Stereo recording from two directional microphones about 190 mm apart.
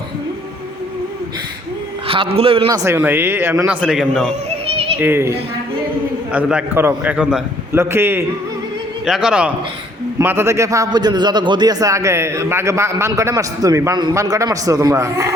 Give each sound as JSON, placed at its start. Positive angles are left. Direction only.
{"t": 2.0, "sound": "a man's voice", "side_deg": -30}
{"t": 3.8, "sound": "a man's voice", "side_deg": -5}